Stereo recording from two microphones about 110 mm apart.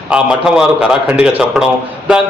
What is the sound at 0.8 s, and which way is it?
Speech, 10° right (ahead or behind).